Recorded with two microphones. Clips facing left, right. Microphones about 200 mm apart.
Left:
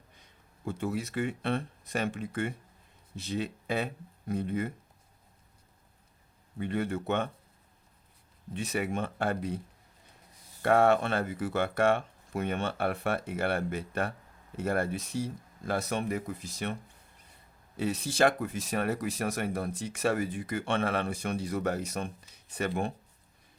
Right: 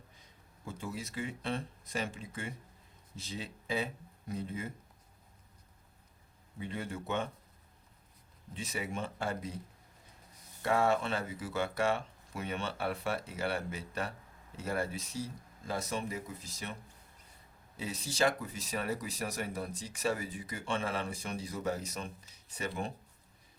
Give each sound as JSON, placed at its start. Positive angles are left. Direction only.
{"t": 0.2, "sound": "speech", "side_deg": 60}
{"t": 6.6, "sound": "speech", "side_deg": 60}
{"t": 8.5, "sound": "speech", "side_deg": 60}
{"t": 10.6, "sound": "speech", "side_deg": 60}
{"t": 17.7, "sound": "speech", "side_deg": 60}